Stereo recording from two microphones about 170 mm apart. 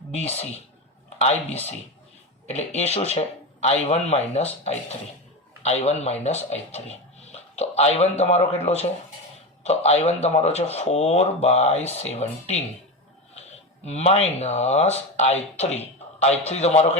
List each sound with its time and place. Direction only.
0.1 s speech: 40° left (ahead or behind)
13.8 s speech: 40° left (ahead or behind)